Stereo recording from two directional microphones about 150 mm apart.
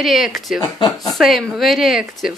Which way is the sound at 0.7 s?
25° left (ahead or behind).